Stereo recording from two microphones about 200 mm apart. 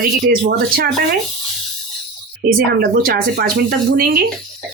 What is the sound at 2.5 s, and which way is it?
Speech, 45° right (ahead or behind).